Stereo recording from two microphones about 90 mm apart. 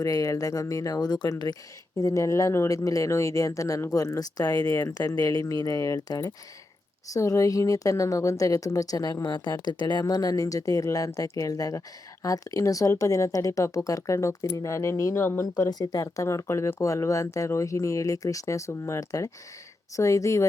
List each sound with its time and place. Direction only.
0.0 s speech: 40° left (ahead or behind)
2.0 s speech: 35° left (ahead or behind)
4.8 s speech: 35° left (ahead or behind)
5.1 s speech: 45° left (ahead or behind)
15.2 s speech: 25° left (ahead or behind)
15.7 s speech: 45° left (ahead or behind)